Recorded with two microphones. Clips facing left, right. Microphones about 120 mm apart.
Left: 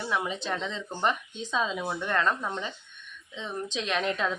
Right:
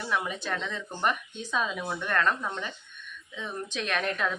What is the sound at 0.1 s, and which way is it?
Speech, 20° left (ahead or behind).